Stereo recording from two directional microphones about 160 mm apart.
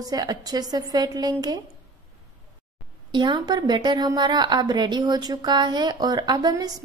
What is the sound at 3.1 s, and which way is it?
A woman's voice, 30° right (ahead or behind).